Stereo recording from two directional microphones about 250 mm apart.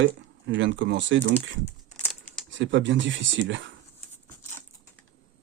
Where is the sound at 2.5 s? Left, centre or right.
Right.